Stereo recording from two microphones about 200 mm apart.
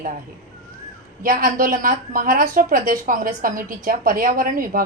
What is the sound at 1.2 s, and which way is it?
A woman's voice, 45° right (ahead or behind).